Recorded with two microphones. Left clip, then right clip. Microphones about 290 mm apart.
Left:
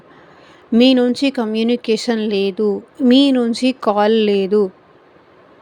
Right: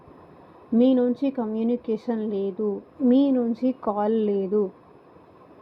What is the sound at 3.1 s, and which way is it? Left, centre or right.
Speech, left.